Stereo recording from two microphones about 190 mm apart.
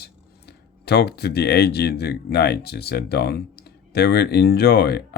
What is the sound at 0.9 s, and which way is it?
Speech, 60° left (ahead or behind).